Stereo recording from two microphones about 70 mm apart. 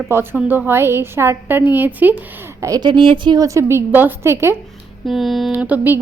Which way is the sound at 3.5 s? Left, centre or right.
Right.